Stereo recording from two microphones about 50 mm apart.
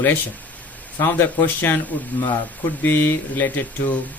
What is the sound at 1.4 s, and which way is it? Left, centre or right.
Speech, left.